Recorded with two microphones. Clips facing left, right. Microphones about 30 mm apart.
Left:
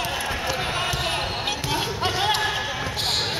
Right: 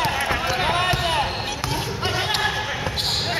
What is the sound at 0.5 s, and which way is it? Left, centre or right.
Basketball bounce, right.